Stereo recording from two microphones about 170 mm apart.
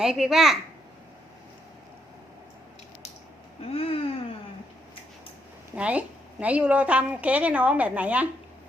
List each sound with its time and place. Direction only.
0.0 s a child's voice: 5° right (ahead or behind)
3.7 s speech: 35° left (ahead or behind)
5.7 s a woman's voice: 5° right (ahead or behind)